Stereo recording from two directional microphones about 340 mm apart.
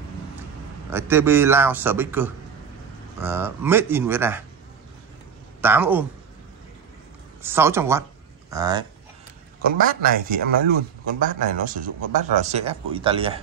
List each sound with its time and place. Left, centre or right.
0.9 s a man's voice: centre
5.6 s speech: centre
7.4 s a man's voice: centre
9.6 s a man's voice: right